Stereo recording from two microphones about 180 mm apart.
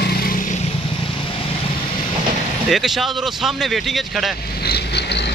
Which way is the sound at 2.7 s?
Centre (ahead or behind).